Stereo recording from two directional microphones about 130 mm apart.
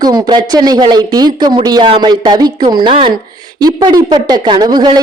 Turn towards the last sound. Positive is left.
turn(degrees=-35)  # may be behind; listen again after turning